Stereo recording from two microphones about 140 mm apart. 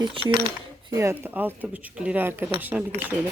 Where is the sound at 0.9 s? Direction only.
20° right (ahead or behind).